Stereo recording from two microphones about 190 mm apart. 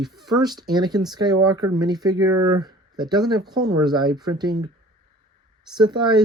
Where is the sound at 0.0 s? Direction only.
Centre (ahead or behind).